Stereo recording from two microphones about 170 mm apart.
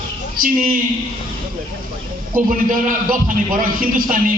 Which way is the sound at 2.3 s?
55° right (ahead or behind).